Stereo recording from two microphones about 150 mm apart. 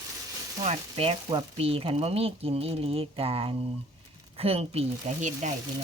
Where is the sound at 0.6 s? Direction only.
40° right (ahead or behind).